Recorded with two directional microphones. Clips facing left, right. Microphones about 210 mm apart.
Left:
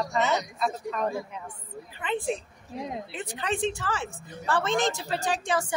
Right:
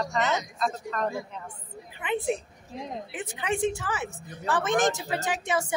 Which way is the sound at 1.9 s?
15° right (ahead or behind).